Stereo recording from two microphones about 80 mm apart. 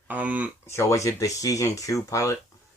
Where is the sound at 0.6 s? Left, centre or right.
Left.